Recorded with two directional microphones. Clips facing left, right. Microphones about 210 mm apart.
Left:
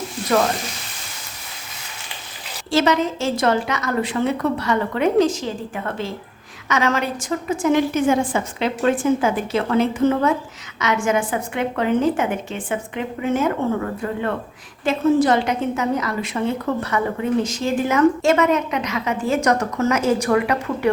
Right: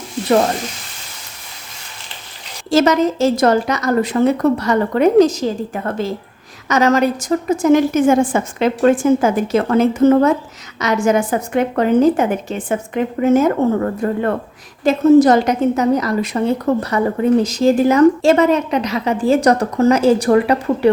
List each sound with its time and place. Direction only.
2.6 s a woman's voice: 40° right (ahead or behind)